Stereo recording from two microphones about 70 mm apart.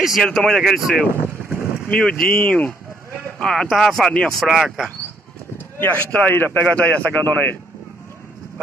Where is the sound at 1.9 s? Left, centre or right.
Centre.